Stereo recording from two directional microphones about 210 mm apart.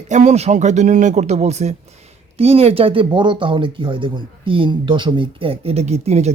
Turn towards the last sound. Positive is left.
turn(degrees=-30)  # may be behind; listen again after turning